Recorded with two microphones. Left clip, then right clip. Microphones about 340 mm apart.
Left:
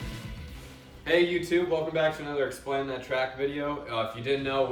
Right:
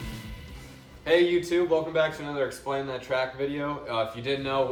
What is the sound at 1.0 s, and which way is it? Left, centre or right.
Speech, centre.